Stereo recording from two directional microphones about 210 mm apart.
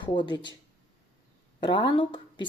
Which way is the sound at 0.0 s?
20° left (ahead or behind).